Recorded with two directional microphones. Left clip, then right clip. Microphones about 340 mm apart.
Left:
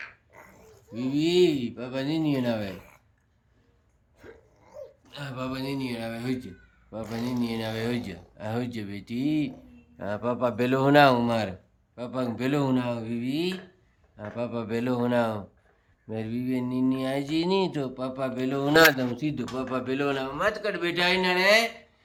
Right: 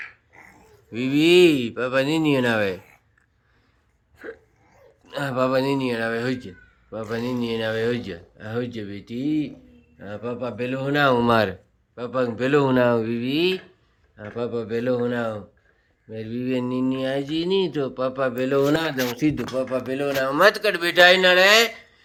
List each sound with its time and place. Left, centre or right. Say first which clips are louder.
0.9 s speech: right 7 dB; centre
5.1 s a man's voice: right 13 dB; centre
20.6 s a man's voice: right 7 dB; right
21.3 s speech: right 6 dB; centre